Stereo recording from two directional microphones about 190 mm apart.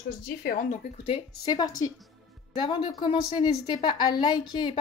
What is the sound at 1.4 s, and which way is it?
A woman's voice, 20° left (ahead or behind).